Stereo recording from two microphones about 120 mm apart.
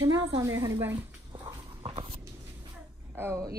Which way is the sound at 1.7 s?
50° right (ahead or behind).